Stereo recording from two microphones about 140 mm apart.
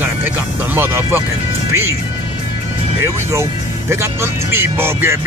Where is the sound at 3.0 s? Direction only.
20° right (ahead or behind).